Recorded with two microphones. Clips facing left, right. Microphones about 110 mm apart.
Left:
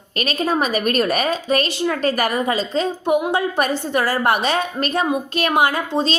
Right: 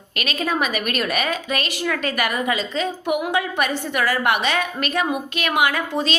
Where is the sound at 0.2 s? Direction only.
35° left (ahead or behind).